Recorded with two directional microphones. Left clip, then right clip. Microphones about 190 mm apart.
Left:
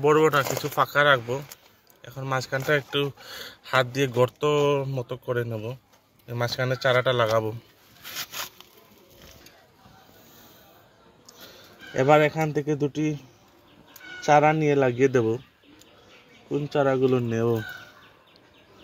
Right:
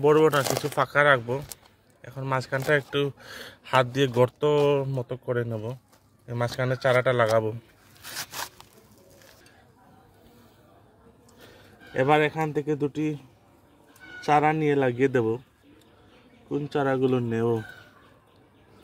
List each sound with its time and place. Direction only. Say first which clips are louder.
0.0 s speech: even; 30° right (ahead or behind)
8.0 s a sound: left 1 dB; 45° right (ahead or behind)
11.9 s a man's voice: left 3 dB; 30° left (ahead or behind)
14.2 s a man's voice: left 3 dB; 20° left (ahead or behind)
16.4 s a man's voice: left 3 dB; 15° left (ahead or behind)